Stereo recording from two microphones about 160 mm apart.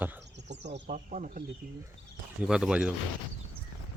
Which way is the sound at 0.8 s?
50° right (ahead or behind).